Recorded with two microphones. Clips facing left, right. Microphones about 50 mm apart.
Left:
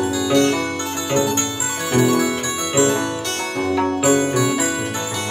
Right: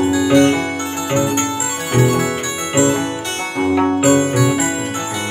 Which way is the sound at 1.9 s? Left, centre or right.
Right.